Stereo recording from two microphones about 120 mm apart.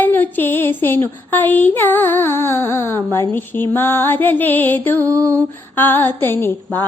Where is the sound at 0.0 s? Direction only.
15° left (ahead or behind).